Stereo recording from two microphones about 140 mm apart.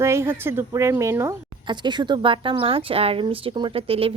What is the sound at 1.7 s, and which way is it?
A woman's voice, 30° right (ahead or behind).